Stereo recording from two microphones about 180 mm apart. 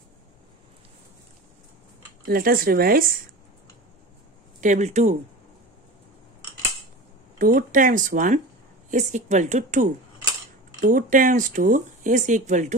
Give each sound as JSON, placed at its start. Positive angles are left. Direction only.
{"t": 2.2, "sound": "speech", "side_deg": -55}
{"t": 4.6, "sound": "speech", "side_deg": -45}
{"t": 7.3, "sound": "speech", "side_deg": -50}